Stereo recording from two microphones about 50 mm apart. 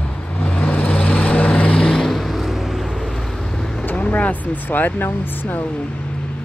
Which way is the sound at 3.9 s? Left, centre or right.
Left.